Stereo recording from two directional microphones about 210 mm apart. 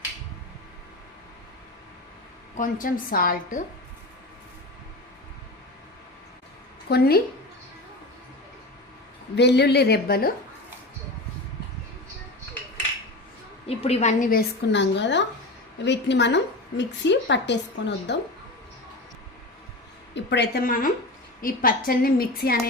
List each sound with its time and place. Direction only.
2.6 s a woman's voice: 40° left (ahead or behind)
6.8 s a woman's voice: 50° left (ahead or behind)
9.3 s a woman's voice: 55° left (ahead or behind)
13.7 s a woman's voice: 30° left (ahead or behind); by 18.2 s 55° left (ahead or behind)
20.1 s a woman's voice: 55° left (ahead or behind)